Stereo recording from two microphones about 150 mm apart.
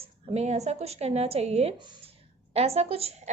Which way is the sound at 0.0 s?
45° right (ahead or behind).